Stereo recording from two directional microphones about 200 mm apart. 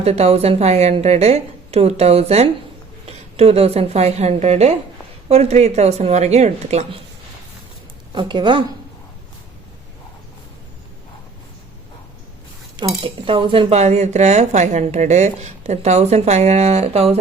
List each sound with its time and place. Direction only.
0.0 s speech: 30° right (ahead or behind)
8.1 s speech: 25° right (ahead or behind)
13.0 s speech: 25° right (ahead or behind)